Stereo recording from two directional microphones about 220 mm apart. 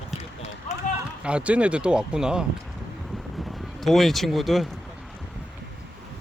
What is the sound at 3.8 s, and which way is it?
Speech, centre (ahead or behind).